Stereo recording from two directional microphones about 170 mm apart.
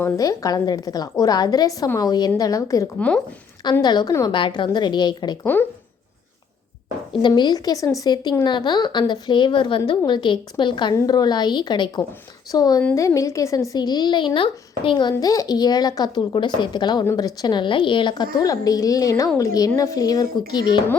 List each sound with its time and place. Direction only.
0.0 s a woman's voice: 20° left (ahead or behind)
7.1 s a woman's voice: 25° left (ahead or behind)